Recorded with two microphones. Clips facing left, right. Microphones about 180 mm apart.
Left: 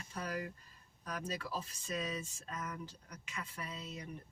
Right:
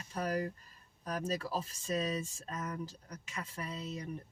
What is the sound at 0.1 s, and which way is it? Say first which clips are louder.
Speech: right 6 dB; 40° right (ahead or behind).